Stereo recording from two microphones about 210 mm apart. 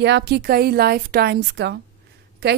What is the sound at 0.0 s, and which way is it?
A woman's voice, 55° right (ahead or behind).